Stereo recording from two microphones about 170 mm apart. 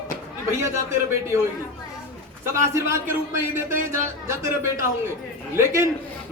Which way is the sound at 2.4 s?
15° right (ahead or behind).